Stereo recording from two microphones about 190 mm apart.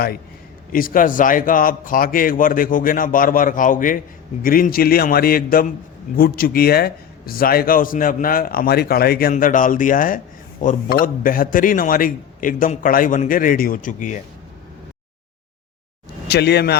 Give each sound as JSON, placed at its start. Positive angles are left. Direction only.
{"t": 0.7, "sound": "speech", "side_deg": 45}
{"t": 16.3, "sound": "speech", "side_deg": 60}